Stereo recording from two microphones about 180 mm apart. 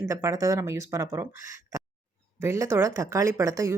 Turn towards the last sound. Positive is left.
turn(degrees=-15)  # may be behind; listen again after turning